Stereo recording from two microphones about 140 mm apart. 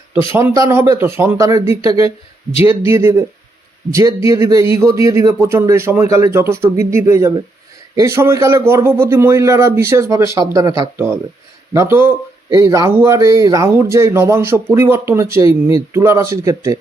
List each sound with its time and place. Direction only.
0.3 s speech: 20° right (ahead or behind)